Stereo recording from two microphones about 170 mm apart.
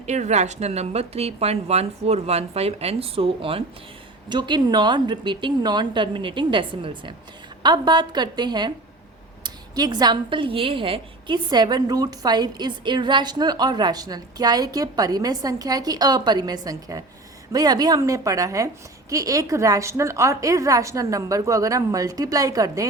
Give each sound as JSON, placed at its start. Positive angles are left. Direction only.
{"t": 0.0, "sound": "a woman's voice", "side_deg": -40}